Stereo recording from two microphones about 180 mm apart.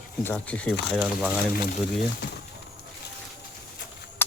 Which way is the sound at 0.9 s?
5° right (ahead or behind).